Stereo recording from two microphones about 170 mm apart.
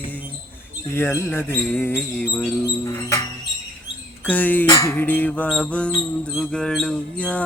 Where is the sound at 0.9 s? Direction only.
15° left (ahead or behind).